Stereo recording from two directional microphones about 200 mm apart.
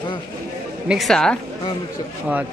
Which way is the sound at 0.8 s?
Centre (ahead or behind).